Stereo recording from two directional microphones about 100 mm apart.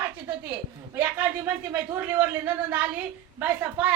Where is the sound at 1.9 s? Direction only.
20° right (ahead or behind).